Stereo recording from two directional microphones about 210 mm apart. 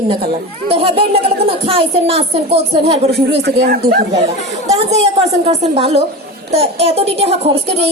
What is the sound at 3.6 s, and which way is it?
Speech, 45° right (ahead or behind).